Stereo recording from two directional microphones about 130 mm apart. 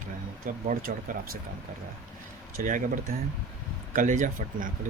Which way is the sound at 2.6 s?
90° right.